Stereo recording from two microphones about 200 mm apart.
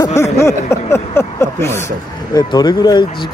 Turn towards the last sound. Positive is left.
turn(degrees=20)  # may be behind; listen again after turning